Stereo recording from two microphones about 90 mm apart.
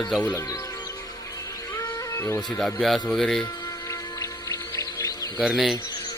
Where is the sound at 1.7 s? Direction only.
35° left (ahead or behind).